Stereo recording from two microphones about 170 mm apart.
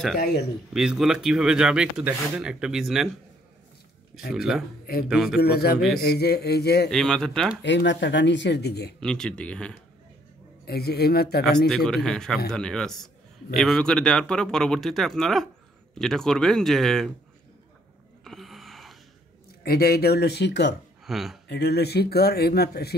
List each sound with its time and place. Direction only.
0.7 s a man's voice: 5° right (ahead or behind)
4.3 s a man's voice: centre (ahead or behind)
5.4 s speech: 65° left (ahead or behind)
6.9 s a man's voice: 5° left (ahead or behind)
7.6 s speech: 90° left; by 8.9 s 75° left (ahead or behind)
9.0 s a man's voice: 5° left (ahead or behind)
10.6 s speech: 70° left (ahead or behind)
11.4 s a man's voice: centre (ahead or behind)
18.2 s a sound: centre (ahead or behind)
19.6 s speech: 65° left (ahead or behind); by 20.7 s 90° left
21.0 s speech: centre (ahead or behind)
21.5 s speech: 80° left